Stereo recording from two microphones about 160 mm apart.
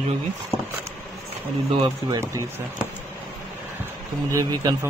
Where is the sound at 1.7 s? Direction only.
30° right (ahead or behind).